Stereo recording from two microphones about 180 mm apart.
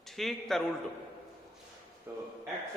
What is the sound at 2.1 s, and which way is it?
Speech, 15° right (ahead or behind).